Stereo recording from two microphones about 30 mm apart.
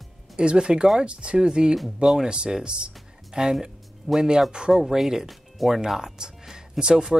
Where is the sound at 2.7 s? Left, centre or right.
Right.